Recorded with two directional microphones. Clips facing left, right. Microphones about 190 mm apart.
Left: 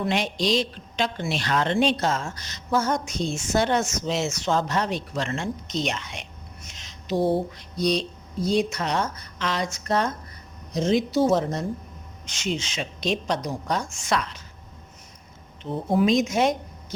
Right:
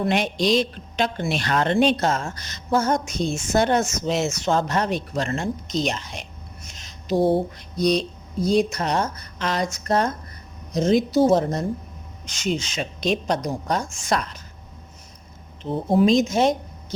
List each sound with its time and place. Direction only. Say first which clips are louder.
0.0 s a woman's voice: right 3 dB; 55° right (ahead or behind); by 6.2 s 40° right (ahead or behind)
6.7 s a sound: right 3 dB; 45° right (ahead or behind)
7.8 s a woman's voice: right 3 dB; 50° right (ahead or behind)
15.7 s speech: right 3 dB; 30° right (ahead or behind)